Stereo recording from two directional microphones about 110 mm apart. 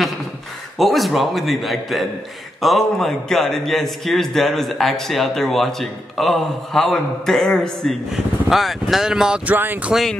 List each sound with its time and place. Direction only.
0.7 s a man's voice: centre (ahead or behind); by 9.9 s 15° right (ahead or behind)